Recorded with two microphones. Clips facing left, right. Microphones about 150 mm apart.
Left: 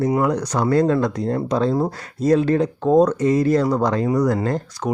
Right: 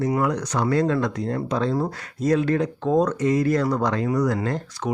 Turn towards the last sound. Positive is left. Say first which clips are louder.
# left 3 dB
turn(degrees=40)  # may be behind; listen again after turning